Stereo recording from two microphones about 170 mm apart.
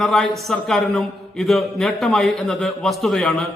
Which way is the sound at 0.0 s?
Centre (ahead or behind).